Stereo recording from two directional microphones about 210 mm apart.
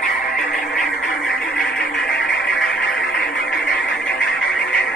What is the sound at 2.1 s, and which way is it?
Music, 50° left (ahead or behind).